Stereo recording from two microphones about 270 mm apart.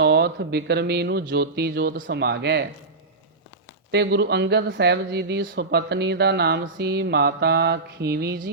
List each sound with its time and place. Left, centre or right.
0.0 s speech: right
3.9 s speech: right